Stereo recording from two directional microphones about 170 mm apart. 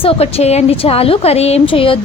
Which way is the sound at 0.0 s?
35° left (ahead or behind).